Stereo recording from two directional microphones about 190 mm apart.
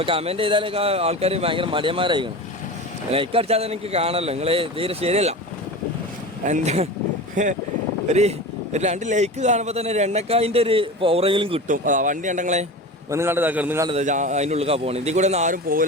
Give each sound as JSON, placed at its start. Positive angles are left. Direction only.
{"t": 0.0, "sound": "speech", "side_deg": -30}
{"t": 6.4, "sound": "speech", "side_deg": -40}
{"t": 11.7, "sound": "speech", "side_deg": -45}
{"t": 13.1, "sound": "a man's voice", "side_deg": -15}
{"t": 13.9, "sound": "speech", "side_deg": -40}